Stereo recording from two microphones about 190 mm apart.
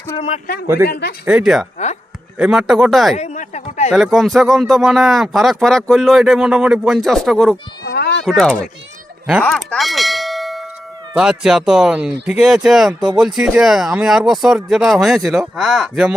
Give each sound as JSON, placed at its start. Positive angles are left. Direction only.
{"t": 0.9, "sound": "speech", "side_deg": 60}
{"t": 1.2, "sound": "speech", "side_deg": -5}
{"t": 3.2, "sound": "a sound", "side_deg": 35}
{"t": 3.9, "sound": "speech", "side_deg": 0}
{"t": 7.9, "sound": "cat", "side_deg": 60}
{"t": 8.2, "sound": "speech", "side_deg": 0}
{"t": 9.4, "sound": "ding", "side_deg": 5}
{"t": 11.2, "sound": "speech", "side_deg": -5}